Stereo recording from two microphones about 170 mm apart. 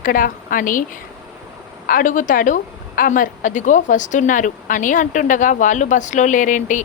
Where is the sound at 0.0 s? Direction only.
55° left (ahead or behind).